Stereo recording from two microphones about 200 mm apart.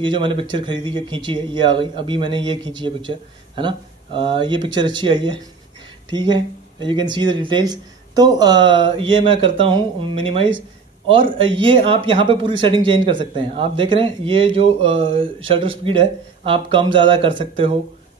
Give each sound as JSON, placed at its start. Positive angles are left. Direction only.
{"t": 0.0, "sound": "speech", "side_deg": -25}